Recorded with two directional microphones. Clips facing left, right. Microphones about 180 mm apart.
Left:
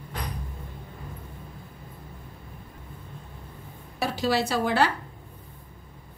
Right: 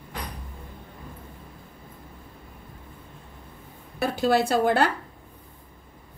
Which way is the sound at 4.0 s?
55° right (ahead or behind).